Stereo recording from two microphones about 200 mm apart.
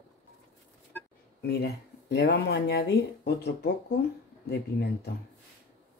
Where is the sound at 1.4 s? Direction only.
50° left (ahead or behind).